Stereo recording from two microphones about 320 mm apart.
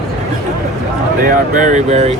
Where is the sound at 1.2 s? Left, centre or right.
Right.